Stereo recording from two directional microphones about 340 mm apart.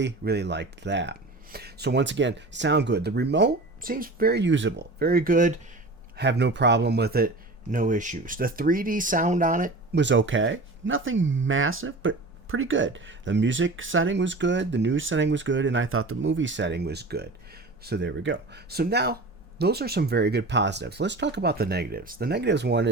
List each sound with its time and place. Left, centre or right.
0.0 s speech: right